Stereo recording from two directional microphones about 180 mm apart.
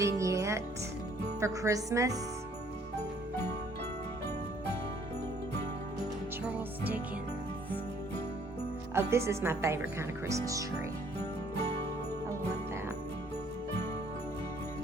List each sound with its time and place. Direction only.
0.0 s music: 15° right (ahead or behind)
1.4 s speech: 15° right (ahead or behind)
6.4 s music: 10° right (ahead or behind)
9.0 s speech: 15° right (ahead or behind)